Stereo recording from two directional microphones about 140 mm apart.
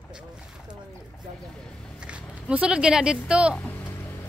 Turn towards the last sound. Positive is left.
turn(degrees=10)  # may be behind; listen again after turning